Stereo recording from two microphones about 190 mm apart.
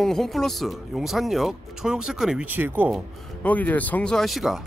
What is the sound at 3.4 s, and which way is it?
Speech, 10° left (ahead or behind).